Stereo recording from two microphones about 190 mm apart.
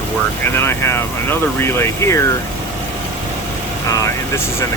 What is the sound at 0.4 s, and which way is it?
Speech, 10° left (ahead or behind).